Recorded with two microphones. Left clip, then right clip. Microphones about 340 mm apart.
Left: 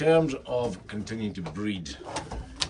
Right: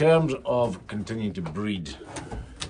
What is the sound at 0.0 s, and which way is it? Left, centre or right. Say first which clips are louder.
Speech: right 2 dB; centre.